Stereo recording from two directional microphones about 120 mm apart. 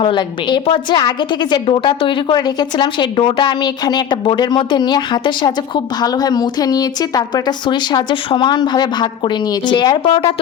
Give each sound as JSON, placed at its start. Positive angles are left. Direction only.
{"t": 0.0, "sound": "a woman's voice", "side_deg": 40}